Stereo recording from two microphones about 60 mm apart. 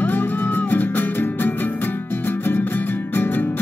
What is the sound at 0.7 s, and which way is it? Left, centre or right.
Music, left.